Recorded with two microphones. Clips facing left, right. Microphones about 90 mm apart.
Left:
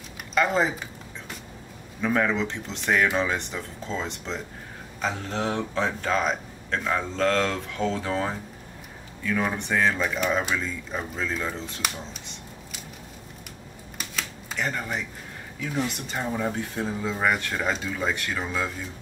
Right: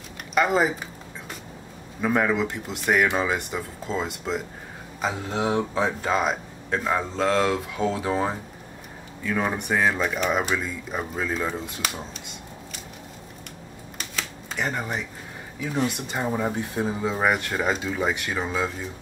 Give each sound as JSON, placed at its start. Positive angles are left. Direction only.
{"t": 0.3, "sound": "speech", "side_deg": -10}
{"t": 2.0, "sound": "speech", "side_deg": -10}
{"t": 14.6, "sound": "speech", "side_deg": -15}
{"t": 16.1, "sound": "speech", "side_deg": -15}